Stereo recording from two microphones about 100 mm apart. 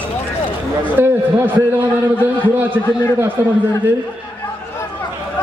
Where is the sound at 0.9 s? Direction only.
20° right (ahead or behind).